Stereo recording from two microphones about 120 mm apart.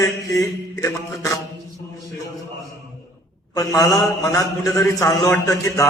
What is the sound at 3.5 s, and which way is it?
A man's voice, 30° left (ahead or behind).